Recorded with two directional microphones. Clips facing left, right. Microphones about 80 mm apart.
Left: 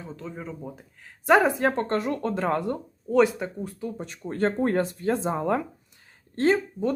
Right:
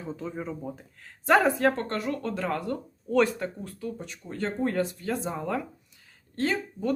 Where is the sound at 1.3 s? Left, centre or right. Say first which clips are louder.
Left 2 dB; centre.